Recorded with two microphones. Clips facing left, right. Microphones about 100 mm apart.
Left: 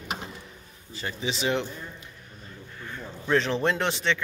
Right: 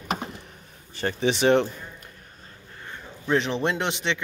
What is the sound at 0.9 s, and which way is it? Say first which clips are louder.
Speech: right 7 dB; 60° right (ahead or behind).